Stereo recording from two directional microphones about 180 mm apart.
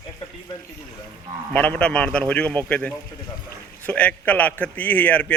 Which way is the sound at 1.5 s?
10° left (ahead or behind).